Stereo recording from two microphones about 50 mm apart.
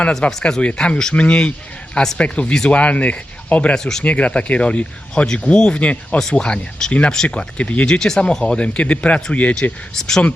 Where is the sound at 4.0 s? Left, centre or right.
Left.